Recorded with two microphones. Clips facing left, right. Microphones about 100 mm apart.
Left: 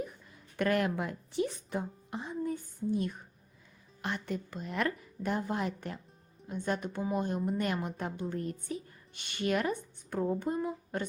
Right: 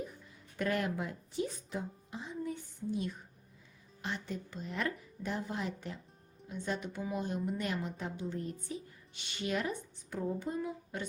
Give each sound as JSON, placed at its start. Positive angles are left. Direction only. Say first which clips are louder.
{"t": 0.5, "sound": "a woman's voice", "louder": "left 4 dB", "side_deg": 65}
{"t": 2.4, "sound": "a sound", "louder": "left 5 dB", "side_deg": 45}
{"t": 4.0, "sound": "a woman's voice", "louder": "left 4 dB", "side_deg": 60}